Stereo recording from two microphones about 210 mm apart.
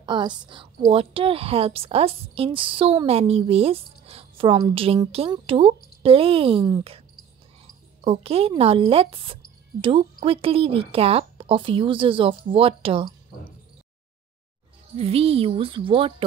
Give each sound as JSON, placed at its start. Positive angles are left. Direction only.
{"t": 0.0, "sound": "a woman's voice", "side_deg": -20}
{"t": 8.0, "sound": "a woman's voice", "side_deg": -25}
{"t": 15.0, "sound": "a woman's voice", "side_deg": -30}